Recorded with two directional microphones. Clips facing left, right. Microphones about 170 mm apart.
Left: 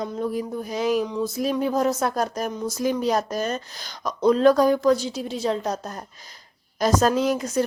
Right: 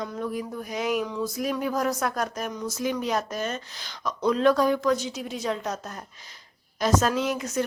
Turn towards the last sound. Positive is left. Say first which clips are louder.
# left 5 dB
turn(degrees=35)  # may be behind; listen again after turning